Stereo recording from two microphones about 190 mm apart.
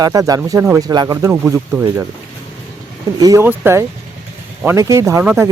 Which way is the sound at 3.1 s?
20° right (ahead or behind).